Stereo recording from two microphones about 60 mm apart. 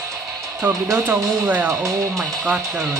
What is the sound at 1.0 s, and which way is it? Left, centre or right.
Speech, right.